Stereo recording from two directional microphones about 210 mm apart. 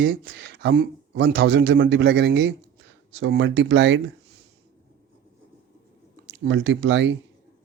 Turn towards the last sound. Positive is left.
turn(degrees=-60)  # may be behind; listen again after turning